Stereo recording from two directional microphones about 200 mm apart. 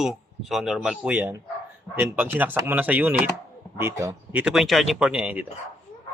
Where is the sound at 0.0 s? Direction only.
Centre (ahead or behind).